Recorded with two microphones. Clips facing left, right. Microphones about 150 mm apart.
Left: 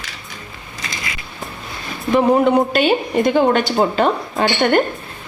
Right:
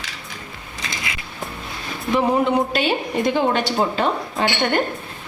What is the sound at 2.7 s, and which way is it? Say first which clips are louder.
Speech: left 5 dB; 50° left (ahead or behind).